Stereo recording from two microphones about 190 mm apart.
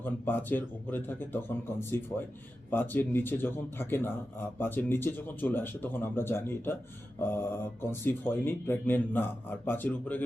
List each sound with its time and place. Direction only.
0.0 s a man's voice: 10° left (ahead or behind)